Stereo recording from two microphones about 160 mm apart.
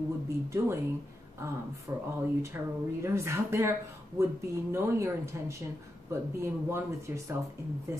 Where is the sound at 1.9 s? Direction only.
15° right (ahead or behind).